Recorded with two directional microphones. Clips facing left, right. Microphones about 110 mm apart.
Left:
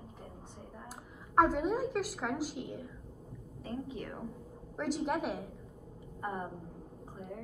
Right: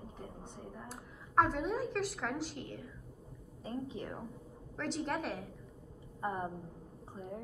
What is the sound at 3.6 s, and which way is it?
Speech, 25° right (ahead or behind).